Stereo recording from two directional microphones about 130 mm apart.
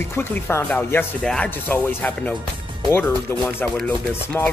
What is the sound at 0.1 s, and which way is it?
Speech, 15° left (ahead or behind).